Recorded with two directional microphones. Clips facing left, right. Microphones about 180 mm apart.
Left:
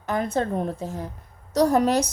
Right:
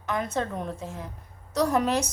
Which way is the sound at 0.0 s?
35° left (ahead or behind).